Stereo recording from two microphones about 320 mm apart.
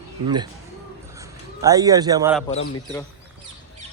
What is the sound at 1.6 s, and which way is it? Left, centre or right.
Speech, centre.